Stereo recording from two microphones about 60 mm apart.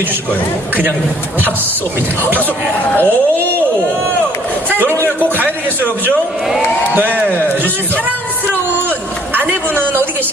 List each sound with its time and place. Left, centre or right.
2.9 s speech: left
4.7 s speech: right
6.9 s speech: right
7.2 s speech: left
9.3 s a sound: right